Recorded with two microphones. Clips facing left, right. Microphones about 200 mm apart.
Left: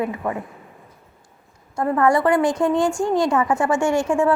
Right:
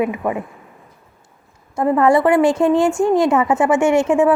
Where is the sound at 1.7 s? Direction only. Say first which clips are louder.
Right 4 dB; 20° right (ahead or behind).